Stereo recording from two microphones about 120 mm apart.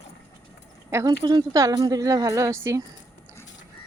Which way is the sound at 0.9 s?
25° right (ahead or behind).